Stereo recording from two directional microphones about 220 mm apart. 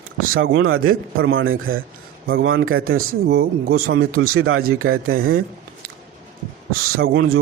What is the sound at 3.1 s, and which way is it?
Speech, 45° right (ahead or behind).